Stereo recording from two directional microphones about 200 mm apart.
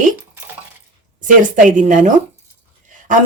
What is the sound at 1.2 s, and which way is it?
Speech, 40° right (ahead or behind).